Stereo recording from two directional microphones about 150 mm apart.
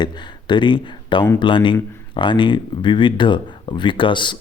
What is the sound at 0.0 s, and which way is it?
Speech, 30° left (ahead or behind).